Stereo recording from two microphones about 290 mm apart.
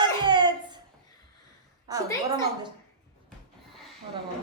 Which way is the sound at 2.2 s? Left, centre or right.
Centre.